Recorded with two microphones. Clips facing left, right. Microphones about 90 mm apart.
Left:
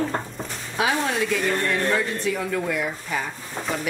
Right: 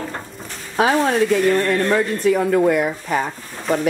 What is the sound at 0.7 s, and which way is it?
Speech, 40° right (ahead or behind).